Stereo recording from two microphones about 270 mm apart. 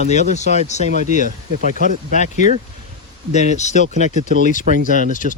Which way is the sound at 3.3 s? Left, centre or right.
Left.